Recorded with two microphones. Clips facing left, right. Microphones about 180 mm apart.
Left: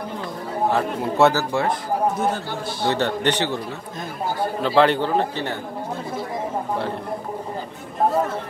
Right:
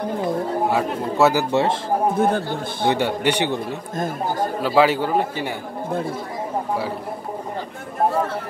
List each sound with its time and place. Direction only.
0.7 s a man's voice: 5° right (ahead or behind)
1.3 s speech: 25° right (ahead or behind)
2.1 s a man's voice: 55° right (ahead or behind)
2.9 s speech: 10° right (ahead or behind)
4.6 s a man's voice: 5° right (ahead or behind)